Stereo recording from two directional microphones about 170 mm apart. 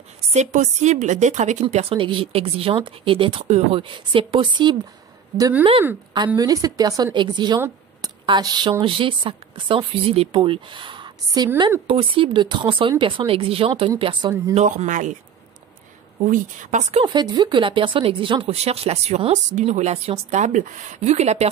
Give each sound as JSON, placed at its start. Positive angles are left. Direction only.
{"t": 0.3, "sound": "a woman's voice", "side_deg": -40}
{"t": 14.5, "sound": "a woman's voice", "side_deg": -40}
{"t": 16.3, "sound": "a woman's voice", "side_deg": -45}
{"t": 17.0, "sound": "a woman's voice", "side_deg": -25}